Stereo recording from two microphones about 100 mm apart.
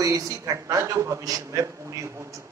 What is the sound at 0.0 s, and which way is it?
A man's voice, 35° right (ahead or behind).